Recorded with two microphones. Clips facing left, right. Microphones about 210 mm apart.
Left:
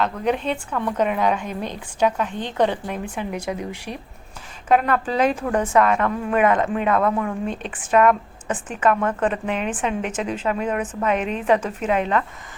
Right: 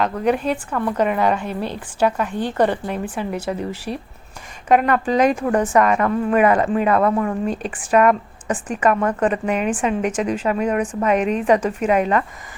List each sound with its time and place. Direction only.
0.0 s a woman's voice: 5° right (ahead or behind)
3.5 s a woman's voice: 5° left (ahead or behind)
3.9 s speech: 35° right (ahead or behind)
4.7 s a woman's voice: 10° right (ahead or behind)